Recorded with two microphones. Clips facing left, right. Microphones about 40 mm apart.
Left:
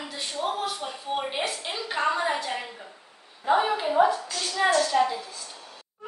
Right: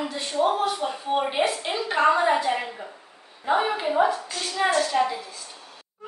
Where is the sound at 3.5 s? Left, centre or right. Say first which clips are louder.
Even; right.